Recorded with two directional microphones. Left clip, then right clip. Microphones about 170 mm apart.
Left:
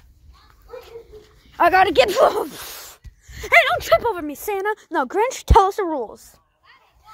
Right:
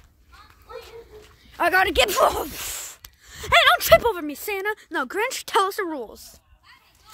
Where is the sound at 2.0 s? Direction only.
10° right (ahead or behind).